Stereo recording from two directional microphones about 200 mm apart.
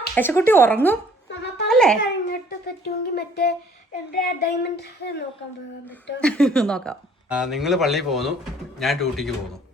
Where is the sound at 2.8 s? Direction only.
55° left (ahead or behind).